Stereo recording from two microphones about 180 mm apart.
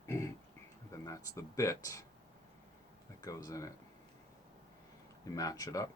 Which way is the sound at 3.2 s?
20° left (ahead or behind).